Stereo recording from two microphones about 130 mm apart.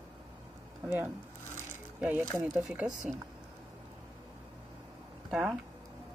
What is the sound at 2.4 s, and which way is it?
Speech, 5° right (ahead or behind).